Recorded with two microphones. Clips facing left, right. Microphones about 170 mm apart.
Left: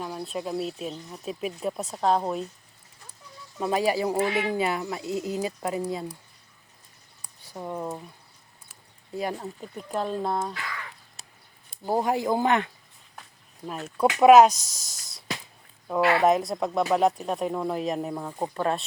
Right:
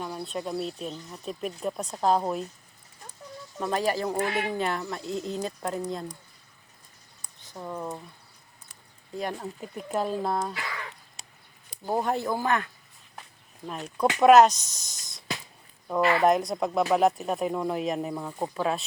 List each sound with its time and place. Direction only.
0.0 s speech: centre (ahead or behind)
3.6 s a man's voice: 5° left (ahead or behind)
7.2 s a sound: 10° left (ahead or behind)
9.1 s speech: centre (ahead or behind)
11.9 s a man's voice: 10° left (ahead or behind)
13.7 s speech: 5° left (ahead or behind)
14.6 s speech: 90° left
16.2 s speech: centre (ahead or behind)
18.5 s speech: 5° right (ahead or behind)